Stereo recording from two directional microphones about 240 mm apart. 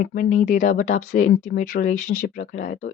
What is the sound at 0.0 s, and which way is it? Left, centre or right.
Speech, left.